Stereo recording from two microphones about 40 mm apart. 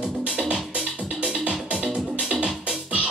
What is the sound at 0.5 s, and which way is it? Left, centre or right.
Music, right.